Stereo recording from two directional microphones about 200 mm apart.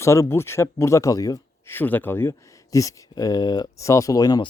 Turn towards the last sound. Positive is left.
turn(degrees=20)  # may be behind; listen again after turning